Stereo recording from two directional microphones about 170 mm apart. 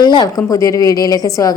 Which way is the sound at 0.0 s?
25° left (ahead or behind).